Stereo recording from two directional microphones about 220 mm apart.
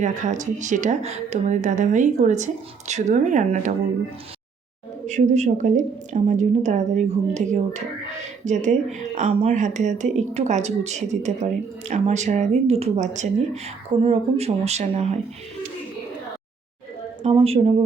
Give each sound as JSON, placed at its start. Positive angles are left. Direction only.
{"t": 0.0, "sound": "speech", "side_deg": -35}
{"t": 5.0, "sound": "speech", "side_deg": -30}
{"t": 17.2, "sound": "speech", "side_deg": -25}